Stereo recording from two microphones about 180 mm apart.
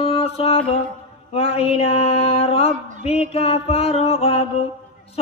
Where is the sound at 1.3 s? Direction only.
35° left (ahead or behind).